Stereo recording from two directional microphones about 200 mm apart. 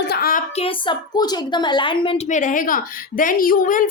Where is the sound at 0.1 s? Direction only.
45° left (ahead or behind).